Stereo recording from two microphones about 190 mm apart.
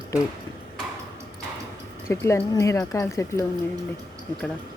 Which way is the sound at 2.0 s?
15° left (ahead or behind).